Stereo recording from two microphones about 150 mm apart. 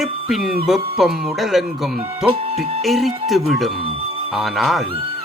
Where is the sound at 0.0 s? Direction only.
5° right (ahead or behind).